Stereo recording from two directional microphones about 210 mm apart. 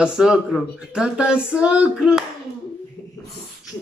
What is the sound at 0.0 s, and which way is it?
Speech, 5° right (ahead or behind).